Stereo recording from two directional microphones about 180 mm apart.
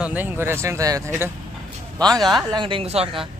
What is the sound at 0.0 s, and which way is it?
Speech, 10° right (ahead or behind).